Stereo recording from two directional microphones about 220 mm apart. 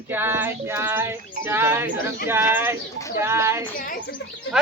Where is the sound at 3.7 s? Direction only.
40° left (ahead or behind).